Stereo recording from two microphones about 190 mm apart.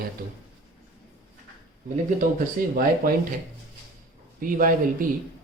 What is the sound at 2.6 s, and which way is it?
Speech, 50° right (ahead or behind).